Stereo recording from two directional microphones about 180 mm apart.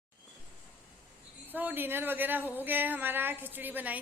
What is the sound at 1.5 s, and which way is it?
Speech, 10° right (ahead or behind).